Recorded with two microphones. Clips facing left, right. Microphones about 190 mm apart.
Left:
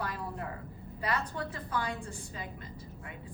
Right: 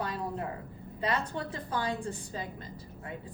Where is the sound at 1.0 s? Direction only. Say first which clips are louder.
Right 2 dB; 25° right (ahead or behind).